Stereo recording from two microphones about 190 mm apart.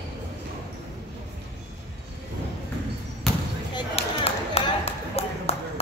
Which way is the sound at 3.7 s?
30° left (ahead or behind).